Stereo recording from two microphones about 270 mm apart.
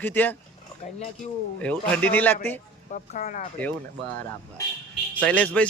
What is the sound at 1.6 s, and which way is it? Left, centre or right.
Speech, centre.